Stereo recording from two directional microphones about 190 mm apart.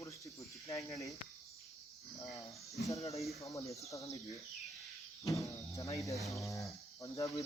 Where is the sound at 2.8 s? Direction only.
60° left (ahead or behind).